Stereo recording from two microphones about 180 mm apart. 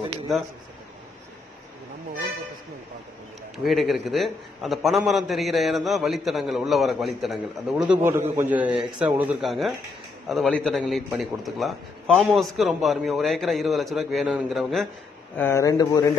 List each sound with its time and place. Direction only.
3.5 s a man's voice: centre (ahead or behind)
15.3 s speech: 15° left (ahead or behind)